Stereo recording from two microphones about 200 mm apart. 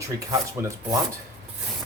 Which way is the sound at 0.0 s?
15° right (ahead or behind).